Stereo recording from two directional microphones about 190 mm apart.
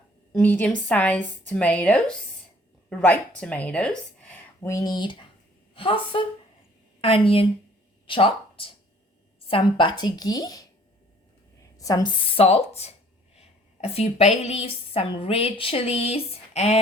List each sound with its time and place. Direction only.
0.3 s a woman's voice: 10° left (ahead or behind)
11.8 s speech: 20° left (ahead or behind)
12.4 s a woman's voice: 30° left (ahead or behind)